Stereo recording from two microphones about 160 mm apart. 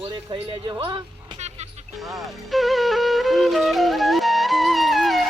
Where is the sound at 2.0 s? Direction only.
Centre (ahead or behind).